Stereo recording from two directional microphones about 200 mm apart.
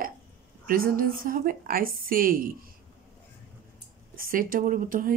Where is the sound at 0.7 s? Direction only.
45° right (ahead or behind).